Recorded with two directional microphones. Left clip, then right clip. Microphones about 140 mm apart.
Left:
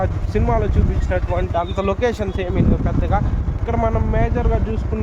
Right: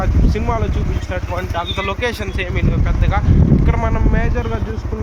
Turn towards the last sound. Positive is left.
turn(degrees=40)  # may be behind; listen again after turning